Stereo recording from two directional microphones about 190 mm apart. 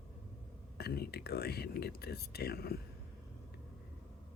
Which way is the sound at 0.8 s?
55° left (ahead or behind).